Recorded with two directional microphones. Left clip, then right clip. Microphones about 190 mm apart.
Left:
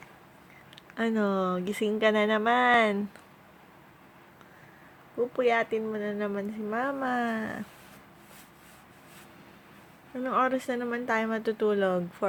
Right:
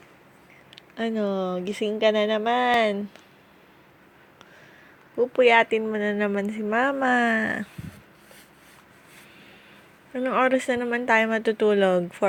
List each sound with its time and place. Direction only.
0.8 s speech: 5° right (ahead or behind)
5.1 s speech: 20° right (ahead or behind)
10.2 s speech: 20° right (ahead or behind)